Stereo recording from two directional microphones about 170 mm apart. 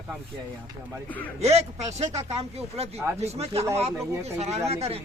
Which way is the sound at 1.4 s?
40° right (ahead or behind).